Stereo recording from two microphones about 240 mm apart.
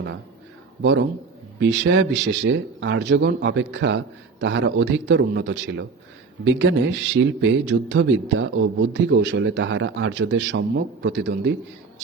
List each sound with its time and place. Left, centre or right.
0.8 s speech: right